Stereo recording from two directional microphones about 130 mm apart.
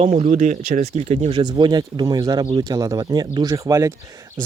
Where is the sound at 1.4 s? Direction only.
35° right (ahead or behind).